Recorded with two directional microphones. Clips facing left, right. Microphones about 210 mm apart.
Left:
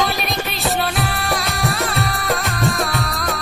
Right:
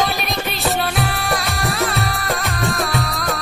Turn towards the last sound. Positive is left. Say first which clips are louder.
# right 1 dB
turn(degrees=0)  # may be behind; listen again after turning